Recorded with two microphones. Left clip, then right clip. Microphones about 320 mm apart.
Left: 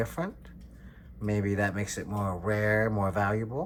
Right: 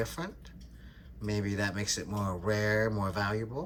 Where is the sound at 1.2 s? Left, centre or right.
Centre.